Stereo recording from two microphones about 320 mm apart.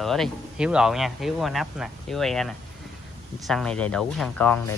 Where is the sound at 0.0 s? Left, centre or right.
Centre.